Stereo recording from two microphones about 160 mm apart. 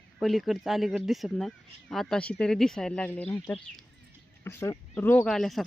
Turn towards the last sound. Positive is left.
turn(degrees=0)  # may be behind; listen again after turning